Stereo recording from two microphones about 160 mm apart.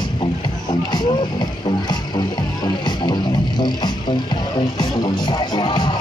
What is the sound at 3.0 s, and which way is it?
Music, 30° left (ahead or behind).